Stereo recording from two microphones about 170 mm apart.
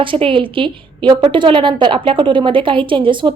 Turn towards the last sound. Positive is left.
turn(degrees=-30)  # may be behind; listen again after turning